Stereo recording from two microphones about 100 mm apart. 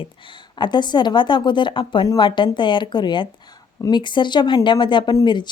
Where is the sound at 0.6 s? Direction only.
50° left (ahead or behind).